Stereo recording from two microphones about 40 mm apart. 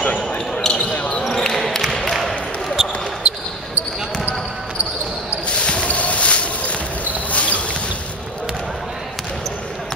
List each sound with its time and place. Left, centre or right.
0.0 s basketball bounce: left
1.4 s basketball bounce: centre
3.3 s basketball bounce: right
5.6 s a sound: left